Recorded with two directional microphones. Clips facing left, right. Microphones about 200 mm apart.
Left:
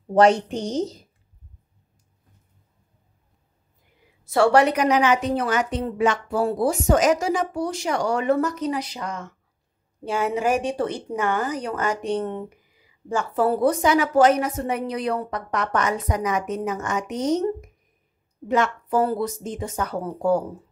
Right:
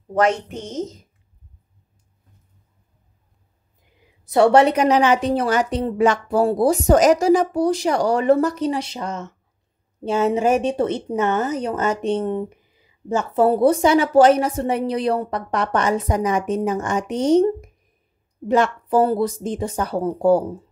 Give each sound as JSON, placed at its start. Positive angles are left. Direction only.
{"t": 0.1, "sound": "a woman's voice", "side_deg": 30}
{"t": 4.3, "sound": "a woman's voice", "side_deg": -20}